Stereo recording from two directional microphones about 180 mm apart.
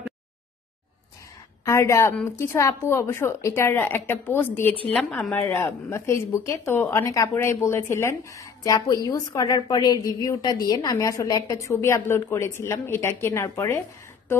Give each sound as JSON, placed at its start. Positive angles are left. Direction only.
{"t": 1.6, "sound": "speech", "side_deg": 15}